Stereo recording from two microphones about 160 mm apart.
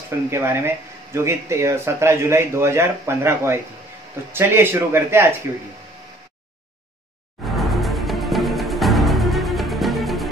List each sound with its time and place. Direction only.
0.3 s speech: 15° right (ahead or behind)
7.5 s music: centre (ahead or behind)